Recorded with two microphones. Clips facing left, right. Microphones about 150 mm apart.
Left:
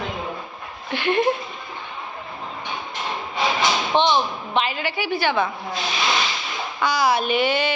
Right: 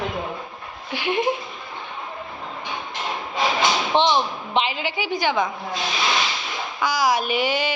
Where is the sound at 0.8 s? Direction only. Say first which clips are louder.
Left 2 dB; 10° right (ahead or behind).